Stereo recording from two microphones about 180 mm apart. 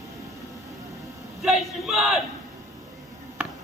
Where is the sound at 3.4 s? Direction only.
10° right (ahead or behind).